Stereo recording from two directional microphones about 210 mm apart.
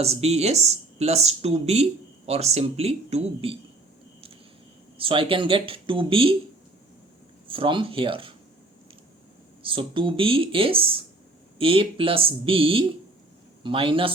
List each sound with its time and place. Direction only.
0.0 s speech: 30° right (ahead or behind)
4.9 s speech: 25° right (ahead or behind)
7.4 s speech: 25° right (ahead or behind)
9.6 s speech: 25° right (ahead or behind)